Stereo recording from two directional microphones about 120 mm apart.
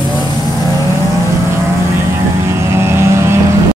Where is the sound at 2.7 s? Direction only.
20° right (ahead or behind).